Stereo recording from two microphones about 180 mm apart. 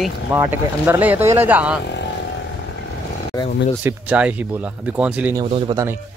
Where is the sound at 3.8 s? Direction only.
10° right (ahead or behind).